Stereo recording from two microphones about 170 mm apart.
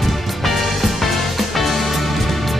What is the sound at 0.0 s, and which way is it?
Music, centre (ahead or behind).